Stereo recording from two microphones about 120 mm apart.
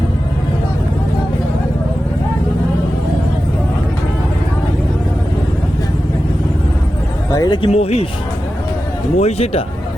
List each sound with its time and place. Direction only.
7.3 s a sound: 30° left (ahead or behind)
7.7 s a man's voice: 60° left (ahead or behind)
9.1 s a man's voice: 60° left (ahead or behind)